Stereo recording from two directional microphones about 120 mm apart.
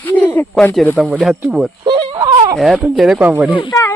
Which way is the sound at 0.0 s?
15° left (ahead or behind).